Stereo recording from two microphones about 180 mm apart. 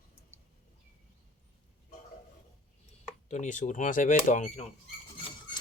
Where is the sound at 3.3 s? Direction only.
45° left (ahead or behind).